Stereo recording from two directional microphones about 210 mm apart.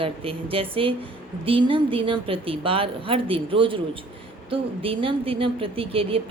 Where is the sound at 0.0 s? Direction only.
25° right (ahead or behind).